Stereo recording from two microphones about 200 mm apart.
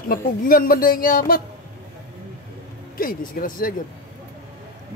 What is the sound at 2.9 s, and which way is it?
Speech, 45° left (ahead or behind).